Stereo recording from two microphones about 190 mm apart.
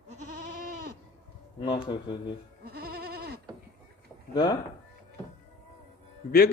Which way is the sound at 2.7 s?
55° right (ahead or behind).